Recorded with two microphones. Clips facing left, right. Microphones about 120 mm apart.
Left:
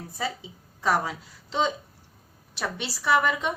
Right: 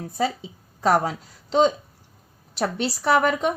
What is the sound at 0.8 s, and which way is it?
Speech, 50° right (ahead or behind).